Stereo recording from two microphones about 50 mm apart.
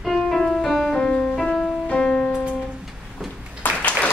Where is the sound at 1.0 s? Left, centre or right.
Centre.